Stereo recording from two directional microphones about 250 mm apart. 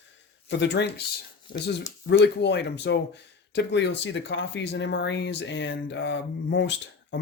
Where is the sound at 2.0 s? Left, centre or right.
Left.